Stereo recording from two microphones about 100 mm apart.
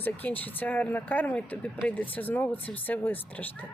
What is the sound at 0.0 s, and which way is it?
Speech, 15° left (ahead or behind).